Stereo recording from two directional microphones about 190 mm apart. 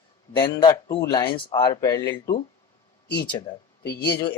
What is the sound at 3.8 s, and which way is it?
Speech, 60° left (ahead or behind).